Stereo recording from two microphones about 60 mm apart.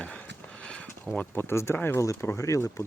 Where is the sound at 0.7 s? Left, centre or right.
Centre.